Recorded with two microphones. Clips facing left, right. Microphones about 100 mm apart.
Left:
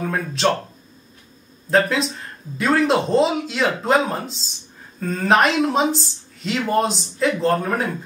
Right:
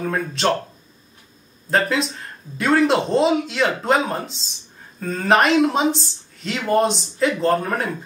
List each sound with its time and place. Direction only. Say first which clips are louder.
0.1 s speech: left 1 dB; centre (ahead or behind)
1.7 s speech: left 2 dB; centre (ahead or behind)